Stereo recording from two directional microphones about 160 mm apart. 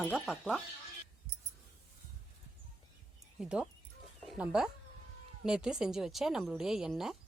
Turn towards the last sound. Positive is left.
turn(degrees=-5)  # may be behind; listen again after turning